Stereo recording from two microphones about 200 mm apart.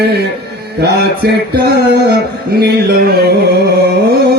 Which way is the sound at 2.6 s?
50° right (ahead or behind).